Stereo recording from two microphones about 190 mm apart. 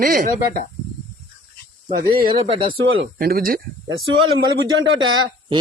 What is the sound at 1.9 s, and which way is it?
Speech, 50° right (ahead or behind).